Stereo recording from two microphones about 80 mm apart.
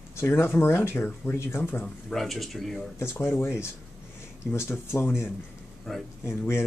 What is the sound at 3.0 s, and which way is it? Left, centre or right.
Speech, left.